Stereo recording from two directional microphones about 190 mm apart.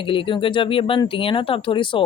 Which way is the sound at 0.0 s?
25° left (ahead or behind).